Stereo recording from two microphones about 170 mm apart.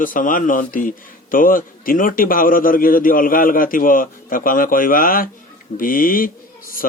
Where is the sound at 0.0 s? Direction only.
55° left (ahead or behind).